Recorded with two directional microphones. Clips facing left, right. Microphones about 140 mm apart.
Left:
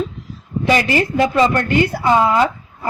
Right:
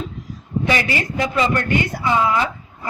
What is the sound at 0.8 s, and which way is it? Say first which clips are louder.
A woman's voice: left 6 dB; 40° left (ahead or behind).